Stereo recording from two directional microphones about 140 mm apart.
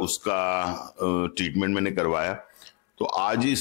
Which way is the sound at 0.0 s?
20° left (ahead or behind).